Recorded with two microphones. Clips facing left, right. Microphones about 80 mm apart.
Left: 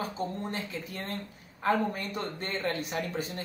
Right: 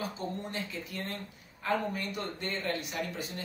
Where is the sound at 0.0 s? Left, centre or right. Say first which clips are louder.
Left 3 dB; left.